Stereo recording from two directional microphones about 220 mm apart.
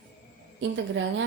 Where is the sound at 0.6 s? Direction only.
55° right (ahead or behind).